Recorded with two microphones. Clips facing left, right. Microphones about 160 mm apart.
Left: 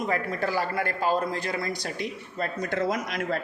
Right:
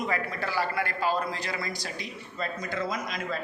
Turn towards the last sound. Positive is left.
turn(degrees=70)  # may be behind; listen again after turning